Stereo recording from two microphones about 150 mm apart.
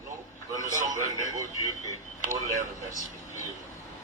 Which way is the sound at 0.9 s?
25° right (ahead or behind).